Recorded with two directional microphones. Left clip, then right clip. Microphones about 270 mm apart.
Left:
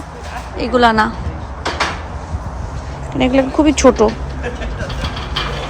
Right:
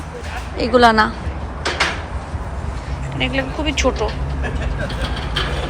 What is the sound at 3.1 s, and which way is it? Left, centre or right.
A woman's voice, left.